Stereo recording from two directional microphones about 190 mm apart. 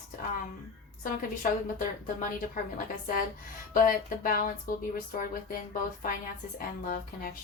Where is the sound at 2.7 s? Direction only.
45° left (ahead or behind).